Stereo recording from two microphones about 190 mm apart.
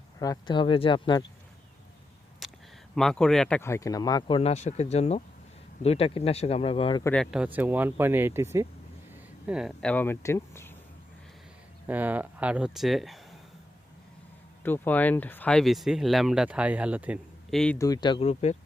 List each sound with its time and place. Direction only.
0.2 s speech: 20° left (ahead or behind)
2.4 s a sound: centre (ahead or behind)
2.9 s speech: 5° left (ahead or behind)
3.6 s speech: 15° left (ahead or behind)
7.0 s speech: 5° left (ahead or behind); by 8.6 s 15° right (ahead or behind)
9.5 s speech: 5° right (ahead or behind)
9.9 s speech: 10° left (ahead or behind)
11.9 s speech: 10° right (ahead or behind)
14.6 s speech: 10° left (ahead or behind); by 17.6 s 5° right (ahead or behind)
17.7 s speech: 20° left (ahead or behind)